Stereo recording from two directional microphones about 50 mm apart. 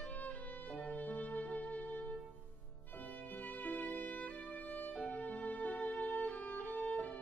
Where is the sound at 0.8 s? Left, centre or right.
Left.